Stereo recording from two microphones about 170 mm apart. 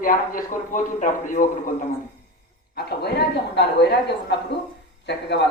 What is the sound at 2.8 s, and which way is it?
Speech, 70° left (ahead or behind).